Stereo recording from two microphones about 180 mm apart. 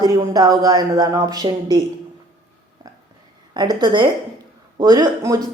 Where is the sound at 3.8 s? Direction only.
25° right (ahead or behind).